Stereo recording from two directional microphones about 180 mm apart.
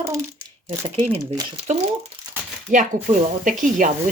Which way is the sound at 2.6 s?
45° right (ahead or behind).